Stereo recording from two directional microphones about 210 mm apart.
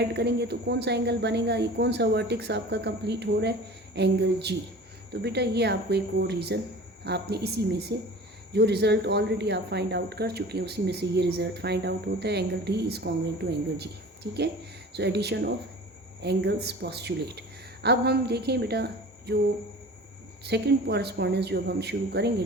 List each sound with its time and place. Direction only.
0.0 s speech: 50° right (ahead or behind)
20.4 s speech: 50° right (ahead or behind)